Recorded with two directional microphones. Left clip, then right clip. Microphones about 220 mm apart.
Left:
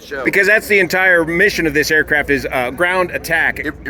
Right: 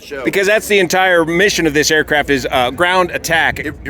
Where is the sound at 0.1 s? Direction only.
25° right (ahead or behind).